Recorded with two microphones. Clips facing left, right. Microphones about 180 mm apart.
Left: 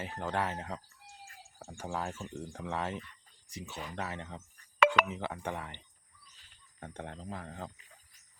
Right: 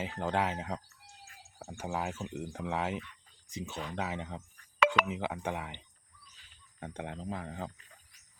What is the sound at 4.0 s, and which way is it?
Speech, 15° right (ahead or behind).